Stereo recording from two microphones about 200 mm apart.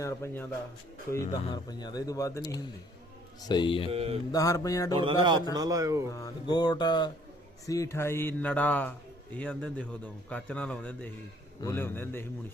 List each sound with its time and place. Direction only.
0.0 s speech: 10° left (ahead or behind)
3.9 s mantra: 30° right (ahead or behind)
4.3 s speech: 15° left (ahead or behind)
4.9 s speech: 25° right (ahead or behind)
6.1 s speech: 20° left (ahead or behind)
7.9 s speech: 10° left (ahead or behind)